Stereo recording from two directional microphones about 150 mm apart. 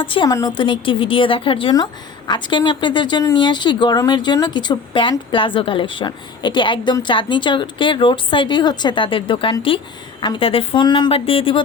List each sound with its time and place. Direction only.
0.0 s a woman's voice: 35° left (ahead or behind)
0.3 s a woman's voice: 25° left (ahead or behind)